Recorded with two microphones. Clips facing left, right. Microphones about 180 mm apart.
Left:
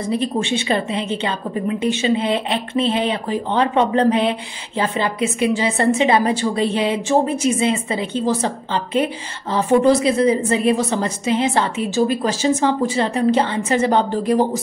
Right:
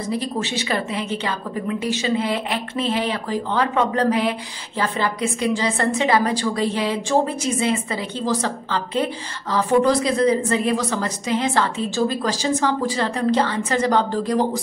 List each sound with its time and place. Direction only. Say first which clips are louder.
0.1 s a woman's voice: left 5 dB; 20° left (ahead or behind)